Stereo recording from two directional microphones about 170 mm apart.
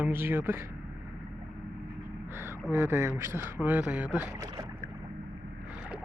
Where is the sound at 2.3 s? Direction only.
15° right (ahead or behind).